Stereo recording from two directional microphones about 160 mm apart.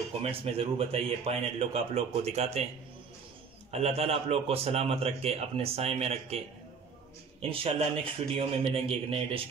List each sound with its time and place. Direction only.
0.2 s a man's voice: 35° right (ahead or behind)
3.7 s a man's voice: 40° right (ahead or behind)
7.4 s a man's voice: 35° right (ahead or behind)